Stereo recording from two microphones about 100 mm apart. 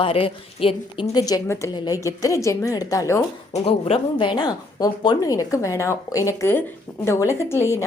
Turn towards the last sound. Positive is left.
turn(degrees=25)  # may be behind; listen again after turning